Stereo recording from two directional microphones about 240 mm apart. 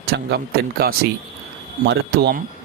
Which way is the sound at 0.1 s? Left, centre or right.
Right.